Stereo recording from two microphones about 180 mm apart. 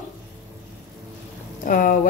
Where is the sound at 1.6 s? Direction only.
45° left (ahead or behind).